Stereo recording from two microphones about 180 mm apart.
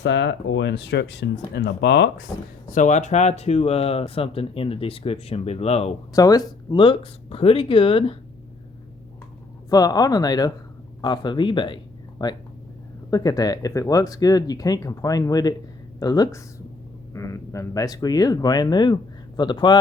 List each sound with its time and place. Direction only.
0.0 s speech: 75° left (ahead or behind)
2.6 s speech: 45° left (ahead or behind)
6.1 s speech: 20° left (ahead or behind)
9.6 s speech: 20° left (ahead or behind)